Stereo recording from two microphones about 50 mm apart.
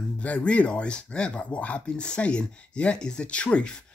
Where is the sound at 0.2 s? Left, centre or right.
Left.